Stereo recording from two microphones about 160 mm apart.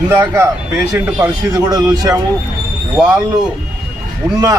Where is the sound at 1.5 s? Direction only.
25° right (ahead or behind).